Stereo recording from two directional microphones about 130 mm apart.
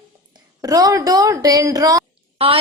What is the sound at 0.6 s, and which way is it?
Speech, 30° right (ahead or behind).